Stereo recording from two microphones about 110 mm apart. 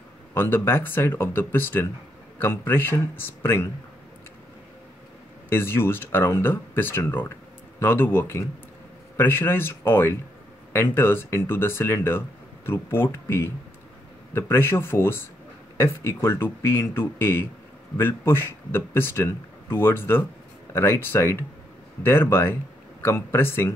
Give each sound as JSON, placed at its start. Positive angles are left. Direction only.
{"t": 0.3, "sound": "speech", "side_deg": 20}
{"t": 5.5, "sound": "speech", "side_deg": 20}